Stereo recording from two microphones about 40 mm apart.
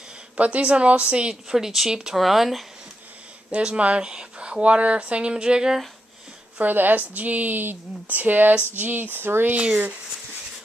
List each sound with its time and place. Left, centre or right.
0.4 s a woman's voice: right
1.3 s speech: centre
2.1 s speech: centre
3.4 s speech: right
6.6 s a woman's voice: right
9.6 s a woman's voice: right